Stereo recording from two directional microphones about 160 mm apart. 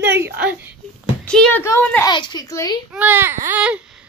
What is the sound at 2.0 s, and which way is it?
Speech, 30° left (ahead or behind).